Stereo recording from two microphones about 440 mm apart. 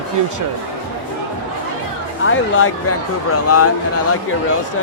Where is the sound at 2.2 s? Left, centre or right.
Left.